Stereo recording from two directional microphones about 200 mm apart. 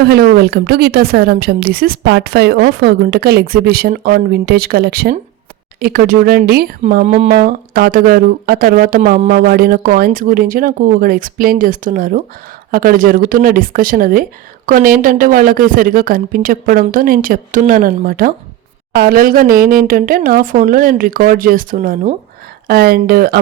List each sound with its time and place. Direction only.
0.0 s a woman's voice: 50° right (ahead or behind)